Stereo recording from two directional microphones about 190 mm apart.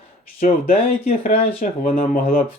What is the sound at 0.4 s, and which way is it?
Speech, 45° left (ahead or behind).